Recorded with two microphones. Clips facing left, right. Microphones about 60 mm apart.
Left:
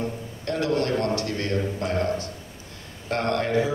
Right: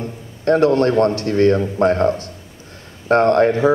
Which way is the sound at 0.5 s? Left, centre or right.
Right.